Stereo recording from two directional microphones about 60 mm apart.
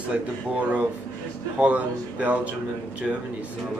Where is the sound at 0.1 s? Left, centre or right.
Right.